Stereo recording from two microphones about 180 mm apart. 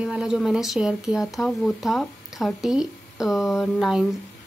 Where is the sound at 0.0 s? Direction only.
5° right (ahead or behind).